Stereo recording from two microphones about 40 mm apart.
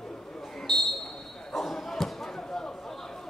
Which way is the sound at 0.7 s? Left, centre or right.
Centre.